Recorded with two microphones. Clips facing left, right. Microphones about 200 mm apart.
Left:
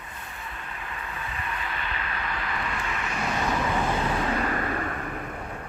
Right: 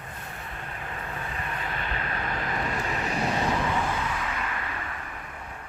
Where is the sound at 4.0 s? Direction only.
35° left (ahead or behind).